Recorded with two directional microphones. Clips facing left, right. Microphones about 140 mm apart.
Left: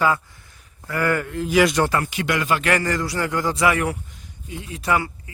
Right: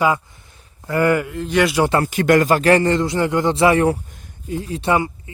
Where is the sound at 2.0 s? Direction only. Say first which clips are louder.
Right 8 dB; 45° right (ahead or behind); by 3.9 s 30° right (ahead or behind).